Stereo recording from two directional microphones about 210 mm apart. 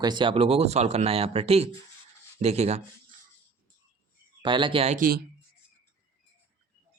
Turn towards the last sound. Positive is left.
turn(degrees=-40)  # may be behind; listen again after turning